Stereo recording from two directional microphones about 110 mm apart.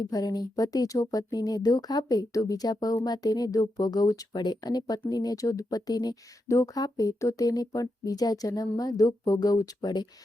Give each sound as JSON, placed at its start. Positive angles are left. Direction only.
{"t": 0.0, "sound": "speech", "side_deg": 35}